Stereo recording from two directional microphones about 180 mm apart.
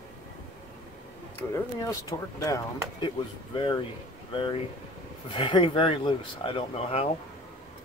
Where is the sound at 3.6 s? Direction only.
25° left (ahead or behind).